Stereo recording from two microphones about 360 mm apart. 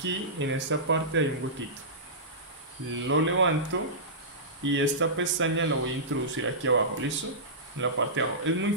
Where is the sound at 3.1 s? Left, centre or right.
Right.